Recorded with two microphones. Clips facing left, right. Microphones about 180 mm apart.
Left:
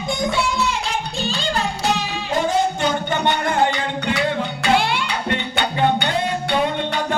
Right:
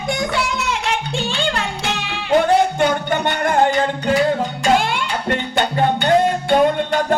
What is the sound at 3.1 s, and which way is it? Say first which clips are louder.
Music: right 2 dB; 50° right (ahead or behind).